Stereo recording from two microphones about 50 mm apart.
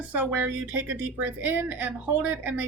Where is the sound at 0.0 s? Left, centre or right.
Right.